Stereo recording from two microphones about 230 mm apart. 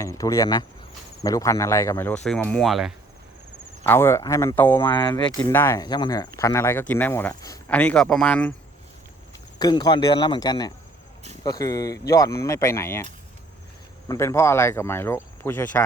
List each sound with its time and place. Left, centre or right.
0.0 s speech: centre
3.8 s speech: centre
9.6 s speech: centre
14.1 s speech: centre